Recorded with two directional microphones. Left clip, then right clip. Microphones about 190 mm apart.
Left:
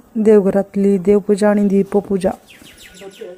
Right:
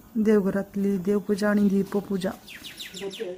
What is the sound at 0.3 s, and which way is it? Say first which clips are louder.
Speech: left 12 dB; 20° left (ahead or behind).